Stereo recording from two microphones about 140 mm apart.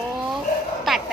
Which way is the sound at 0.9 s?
Centre (ahead or behind).